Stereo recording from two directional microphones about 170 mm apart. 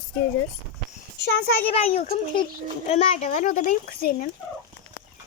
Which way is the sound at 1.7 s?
35° left (ahead or behind).